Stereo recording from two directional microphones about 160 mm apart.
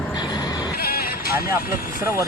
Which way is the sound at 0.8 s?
70° left (ahead or behind).